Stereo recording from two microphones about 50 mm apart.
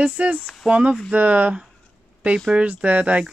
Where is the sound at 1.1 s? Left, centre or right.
Right.